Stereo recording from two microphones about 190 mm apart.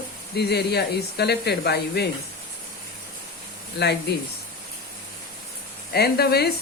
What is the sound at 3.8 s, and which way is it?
Speech, 60° left (ahead or behind).